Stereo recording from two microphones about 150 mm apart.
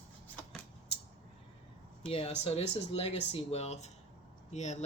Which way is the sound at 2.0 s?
40° left (ahead or behind).